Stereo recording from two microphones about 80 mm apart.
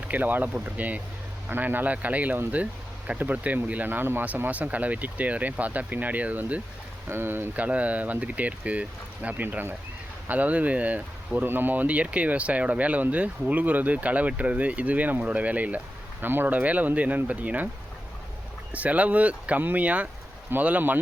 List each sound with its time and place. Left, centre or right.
0.1 s speech: right
18.7 s speech: centre